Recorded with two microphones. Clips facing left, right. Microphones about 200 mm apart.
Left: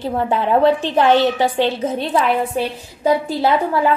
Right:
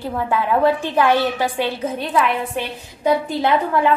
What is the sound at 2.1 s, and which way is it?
Speech, 40° left (ahead or behind).